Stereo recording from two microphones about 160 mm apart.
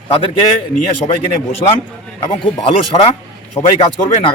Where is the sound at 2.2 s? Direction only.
35° left (ahead or behind).